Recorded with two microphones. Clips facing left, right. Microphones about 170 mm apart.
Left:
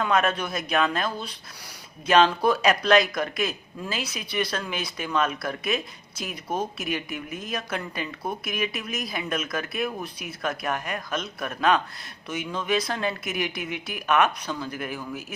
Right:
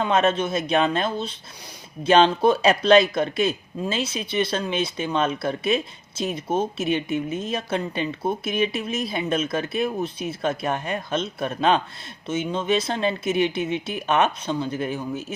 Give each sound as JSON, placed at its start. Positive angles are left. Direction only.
{"t": 0.0, "sound": "speech", "side_deg": -25}